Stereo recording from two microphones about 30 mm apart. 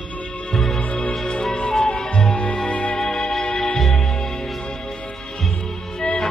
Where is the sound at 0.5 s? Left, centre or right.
Centre.